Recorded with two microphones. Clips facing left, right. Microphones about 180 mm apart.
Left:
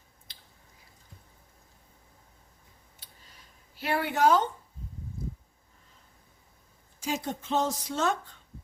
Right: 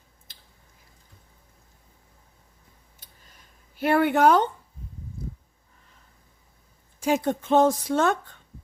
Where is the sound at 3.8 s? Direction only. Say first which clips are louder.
Right 6 dB; 55° right (ahead or behind).